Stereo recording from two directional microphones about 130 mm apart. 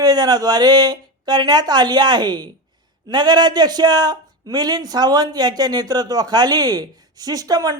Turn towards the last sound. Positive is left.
turn(degrees=-25)  # may be behind; listen again after turning